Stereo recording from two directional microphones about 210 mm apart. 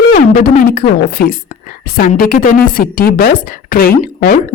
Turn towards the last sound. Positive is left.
turn(degrees=45)  # may be behind; listen again after turning